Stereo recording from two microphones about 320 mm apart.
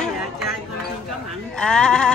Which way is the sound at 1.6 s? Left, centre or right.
Centre.